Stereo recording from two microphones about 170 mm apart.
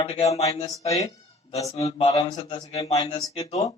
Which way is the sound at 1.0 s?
35° left (ahead or behind).